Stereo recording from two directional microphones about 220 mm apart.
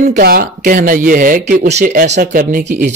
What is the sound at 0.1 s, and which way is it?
Speech, 40° right (ahead or behind).